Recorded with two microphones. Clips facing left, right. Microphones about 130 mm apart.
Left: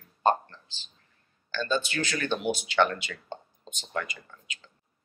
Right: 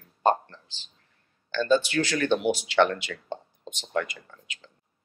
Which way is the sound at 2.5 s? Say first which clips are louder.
Right 3 dB; 90° right.